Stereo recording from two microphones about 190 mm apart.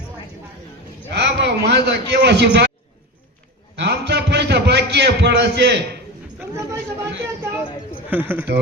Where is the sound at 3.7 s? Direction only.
65° right (ahead or behind).